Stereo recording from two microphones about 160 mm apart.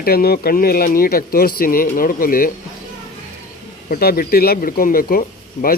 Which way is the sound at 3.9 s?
65° left (ahead or behind).